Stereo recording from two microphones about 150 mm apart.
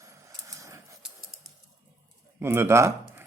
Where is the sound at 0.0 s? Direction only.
20° right (ahead or behind).